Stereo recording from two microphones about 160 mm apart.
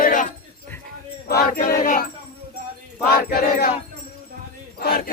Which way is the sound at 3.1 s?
70° left (ahead or behind).